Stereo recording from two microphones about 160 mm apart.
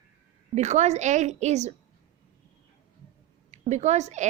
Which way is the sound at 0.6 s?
45° right (ahead or behind).